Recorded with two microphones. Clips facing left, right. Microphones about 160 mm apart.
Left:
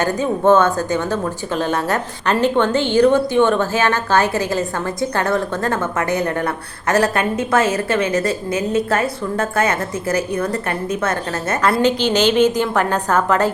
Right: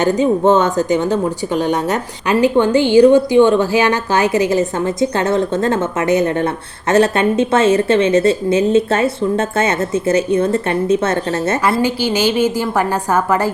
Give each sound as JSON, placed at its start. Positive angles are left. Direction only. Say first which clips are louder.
{"t": 0.0, "sound": "speech", "louder": "right 4 dB", "side_deg": -20}
{"t": 11.8, "sound": "a woman's voice", "louder": "even", "side_deg": -10}